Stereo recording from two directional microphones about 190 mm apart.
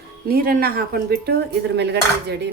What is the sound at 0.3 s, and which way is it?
Speech, 50° right (ahead or behind).